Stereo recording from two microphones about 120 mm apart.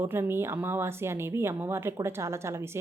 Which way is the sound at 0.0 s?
20° right (ahead or behind).